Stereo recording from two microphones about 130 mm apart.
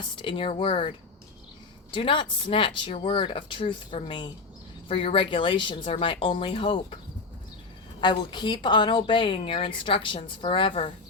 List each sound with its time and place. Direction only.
0.0 s a woman's voice: 40° left (ahead or behind)
8.0 s a woman's voice: 35° left (ahead or behind)